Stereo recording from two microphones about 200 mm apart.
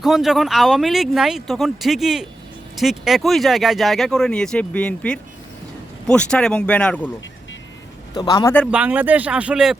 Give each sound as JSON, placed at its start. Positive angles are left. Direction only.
{"t": 0.0, "sound": "speech", "side_deg": 0}
{"t": 8.1, "sound": "a man's voice", "side_deg": 20}
{"t": 8.5, "sound": "speech", "side_deg": -5}